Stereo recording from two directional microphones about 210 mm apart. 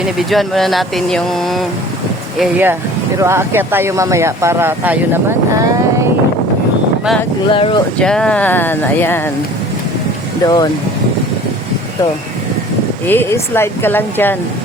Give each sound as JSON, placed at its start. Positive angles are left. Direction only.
{"t": 0.0, "sound": "speech", "side_deg": 0}
{"t": 2.4, "sound": "speech", "side_deg": -10}
{"t": 7.5, "sound": "speech", "side_deg": 25}
{"t": 8.0, "sound": "speech", "side_deg": 5}
{"t": 10.4, "sound": "speech", "side_deg": 20}
{"t": 13.1, "sound": "speech", "side_deg": 10}